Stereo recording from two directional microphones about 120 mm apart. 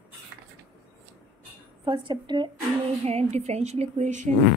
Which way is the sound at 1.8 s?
40° right (ahead or behind).